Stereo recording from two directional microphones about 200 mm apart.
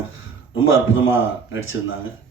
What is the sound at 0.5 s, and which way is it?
A man's voice, 80° left.